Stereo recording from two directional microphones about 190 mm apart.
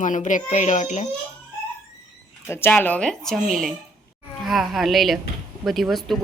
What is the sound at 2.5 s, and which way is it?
Speech, 10° left (ahead or behind).